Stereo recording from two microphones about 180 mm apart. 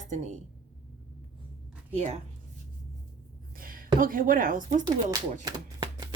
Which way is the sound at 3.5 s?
50° right (ahead or behind).